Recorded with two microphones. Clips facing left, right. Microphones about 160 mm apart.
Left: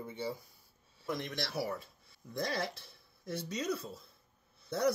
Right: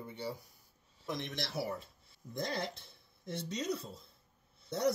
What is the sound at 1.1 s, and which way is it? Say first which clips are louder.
Speech: left 2 dB; 25° right (ahead or behind).